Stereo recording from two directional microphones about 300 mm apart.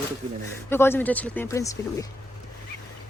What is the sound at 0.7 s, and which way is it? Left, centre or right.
Speech, centre.